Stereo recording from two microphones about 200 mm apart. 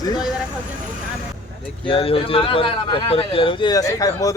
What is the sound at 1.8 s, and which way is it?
A man's voice, 25° left (ahead or behind).